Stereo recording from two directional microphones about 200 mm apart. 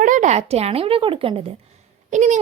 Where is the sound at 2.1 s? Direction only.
40° right (ahead or behind).